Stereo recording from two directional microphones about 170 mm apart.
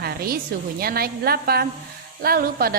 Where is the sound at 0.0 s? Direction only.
65° right (ahead or behind).